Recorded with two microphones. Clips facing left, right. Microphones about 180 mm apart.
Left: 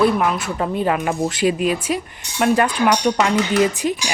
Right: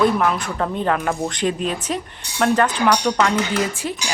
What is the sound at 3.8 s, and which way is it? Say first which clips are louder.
Dishes: left 5 dB; 20° left (ahead or behind).